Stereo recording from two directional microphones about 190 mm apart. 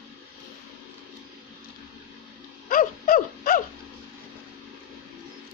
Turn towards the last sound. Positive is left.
turn(degrees=45)  # may be behind; listen again after turning